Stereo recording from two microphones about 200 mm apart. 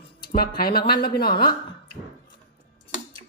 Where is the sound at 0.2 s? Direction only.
50° left (ahead or behind).